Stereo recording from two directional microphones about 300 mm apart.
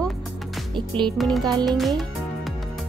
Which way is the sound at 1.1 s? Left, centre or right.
Centre.